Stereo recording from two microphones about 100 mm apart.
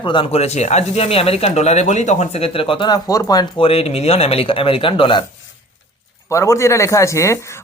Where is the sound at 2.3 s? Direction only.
75° left (ahead or behind).